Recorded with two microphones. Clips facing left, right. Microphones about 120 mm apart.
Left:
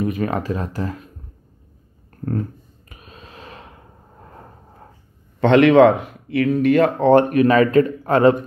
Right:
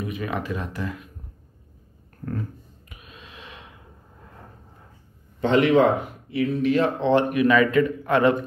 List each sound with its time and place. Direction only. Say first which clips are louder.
0.0 s speech: left 7 dB; 45° left (ahead or behind)
2.9 s a sound: left 4 dB; 40° left (ahead or behind)
5.4 s speech: left 6 dB; 70° left (ahead or behind); by 8.4 s 35° left (ahead or behind)